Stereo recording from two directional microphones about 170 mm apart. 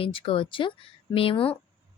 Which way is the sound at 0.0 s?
30° left (ahead or behind).